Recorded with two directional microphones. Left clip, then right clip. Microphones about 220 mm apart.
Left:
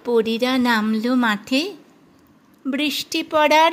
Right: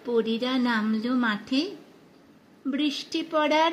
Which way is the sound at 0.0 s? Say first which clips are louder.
Left 7 dB; 45° left (ahead or behind).